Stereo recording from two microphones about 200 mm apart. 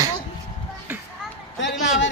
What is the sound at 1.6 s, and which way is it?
Speech, 65° left (ahead or behind).